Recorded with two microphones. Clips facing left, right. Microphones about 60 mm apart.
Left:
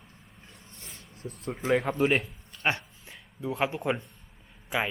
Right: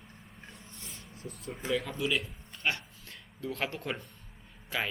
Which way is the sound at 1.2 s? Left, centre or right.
Left.